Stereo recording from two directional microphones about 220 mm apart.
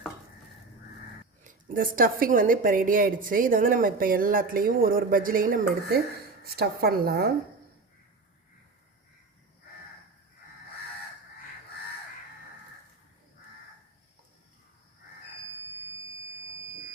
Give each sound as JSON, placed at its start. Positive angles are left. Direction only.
{"t": 1.5, "sound": "a woman's voice", "side_deg": -40}